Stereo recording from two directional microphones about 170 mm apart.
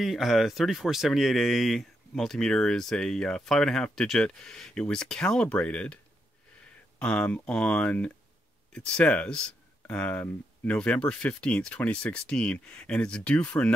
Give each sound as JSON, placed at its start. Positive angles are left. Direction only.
{"t": 0.0, "sound": "speech", "side_deg": 0}
{"t": 7.0, "sound": "speech", "side_deg": 5}